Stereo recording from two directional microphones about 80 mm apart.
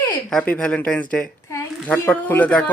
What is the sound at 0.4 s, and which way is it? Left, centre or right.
A woman's voice, centre.